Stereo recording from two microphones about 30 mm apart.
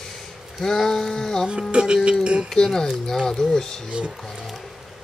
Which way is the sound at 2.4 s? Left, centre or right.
Centre.